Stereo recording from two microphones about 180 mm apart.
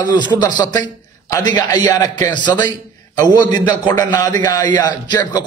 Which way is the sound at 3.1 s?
20° left (ahead or behind).